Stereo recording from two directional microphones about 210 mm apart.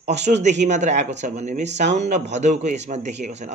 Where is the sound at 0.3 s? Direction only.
35° right (ahead or behind).